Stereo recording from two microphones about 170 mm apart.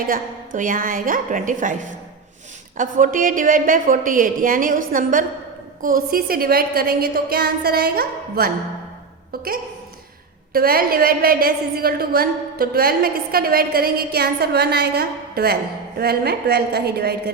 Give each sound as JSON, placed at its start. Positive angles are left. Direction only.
{"t": 0.1, "sound": "a woman's voice", "side_deg": -50}